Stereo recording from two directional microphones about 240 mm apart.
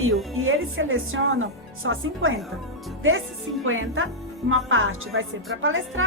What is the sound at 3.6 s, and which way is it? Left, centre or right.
A woman's voice, right.